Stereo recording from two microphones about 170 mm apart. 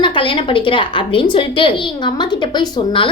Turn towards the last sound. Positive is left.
turn(degrees=30)  # may be behind; listen again after turning